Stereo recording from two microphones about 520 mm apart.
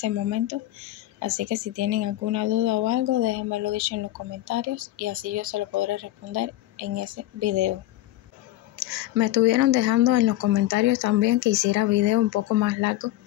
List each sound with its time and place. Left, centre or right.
0.0 s speech: right
8.7 s speech: right